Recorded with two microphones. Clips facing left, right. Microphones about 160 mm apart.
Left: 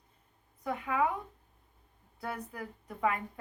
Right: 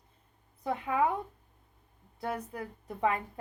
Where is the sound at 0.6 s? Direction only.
30° right (ahead or behind).